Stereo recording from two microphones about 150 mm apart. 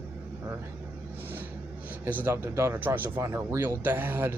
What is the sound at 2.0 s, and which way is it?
Speech, 15° right (ahead or behind).